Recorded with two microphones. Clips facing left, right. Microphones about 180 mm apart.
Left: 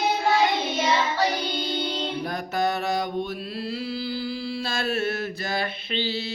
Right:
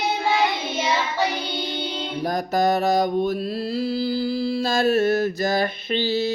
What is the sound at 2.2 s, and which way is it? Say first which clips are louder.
Mantra: right 7 dB; 40° right (ahead or behind).